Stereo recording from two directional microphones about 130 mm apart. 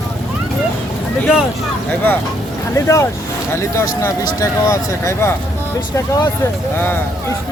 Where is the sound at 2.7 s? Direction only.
20° left (ahead or behind).